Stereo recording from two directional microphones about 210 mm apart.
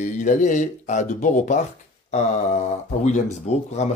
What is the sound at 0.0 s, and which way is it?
Speech, 35° left (ahead or behind).